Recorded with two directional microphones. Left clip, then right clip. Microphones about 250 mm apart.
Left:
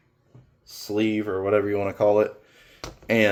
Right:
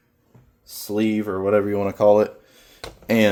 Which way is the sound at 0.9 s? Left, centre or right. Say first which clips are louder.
Right 1 dB; right.